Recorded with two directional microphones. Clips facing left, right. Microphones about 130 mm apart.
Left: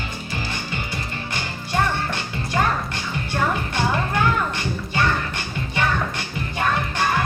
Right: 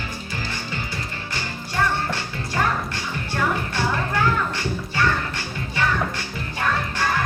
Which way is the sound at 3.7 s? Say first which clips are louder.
Left 1 dB; 20° left (ahead or behind).